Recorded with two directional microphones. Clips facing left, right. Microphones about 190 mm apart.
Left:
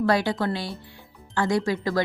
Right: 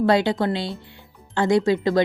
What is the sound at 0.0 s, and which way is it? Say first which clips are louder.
A woman's voice: right 4 dB; 25° right (ahead or behind).